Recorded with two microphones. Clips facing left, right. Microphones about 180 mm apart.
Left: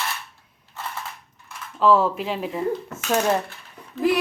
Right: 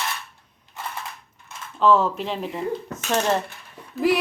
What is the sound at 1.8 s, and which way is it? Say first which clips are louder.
Speech: even; 10° left (ahead or behind).